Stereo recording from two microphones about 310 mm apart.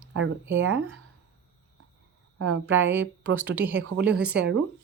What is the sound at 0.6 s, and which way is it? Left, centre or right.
Speech, right.